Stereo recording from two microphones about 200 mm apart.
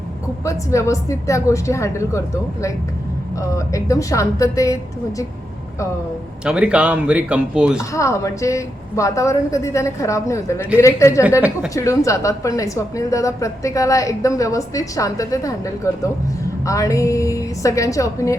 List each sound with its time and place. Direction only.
0.4 s a woman's voice: 15° left (ahead or behind)
6.4 s speech: 5° right (ahead or behind)
7.8 s a woman's voice: 15° left (ahead or behind)